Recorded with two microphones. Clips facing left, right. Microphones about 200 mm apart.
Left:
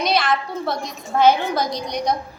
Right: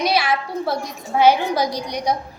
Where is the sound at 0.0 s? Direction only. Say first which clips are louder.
Even; 10° right (ahead or behind).